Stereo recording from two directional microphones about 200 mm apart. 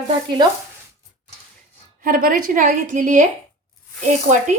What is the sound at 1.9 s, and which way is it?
A woman's voice, 45° right (ahead or behind).